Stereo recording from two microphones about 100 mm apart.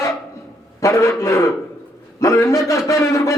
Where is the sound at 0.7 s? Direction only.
30° left (ahead or behind).